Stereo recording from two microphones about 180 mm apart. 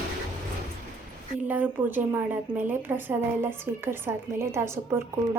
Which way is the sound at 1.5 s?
10° right (ahead or behind).